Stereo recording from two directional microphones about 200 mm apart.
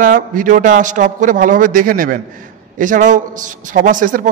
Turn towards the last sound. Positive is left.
turn(degrees=-40)  # may be behind; listen again after turning